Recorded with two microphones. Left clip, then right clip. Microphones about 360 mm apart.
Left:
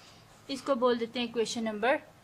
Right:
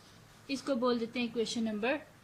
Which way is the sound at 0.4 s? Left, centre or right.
Centre.